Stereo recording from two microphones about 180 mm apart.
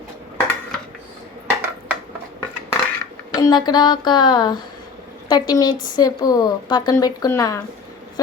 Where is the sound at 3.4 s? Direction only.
25° left (ahead or behind).